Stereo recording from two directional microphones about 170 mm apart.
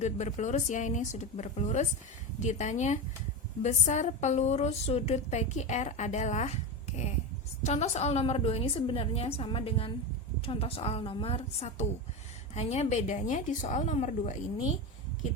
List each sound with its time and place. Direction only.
0.0 s a woman's voice: 45° left (ahead or behind)